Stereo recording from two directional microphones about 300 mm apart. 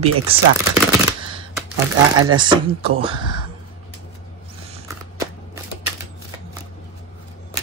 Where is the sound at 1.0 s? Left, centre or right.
Centre.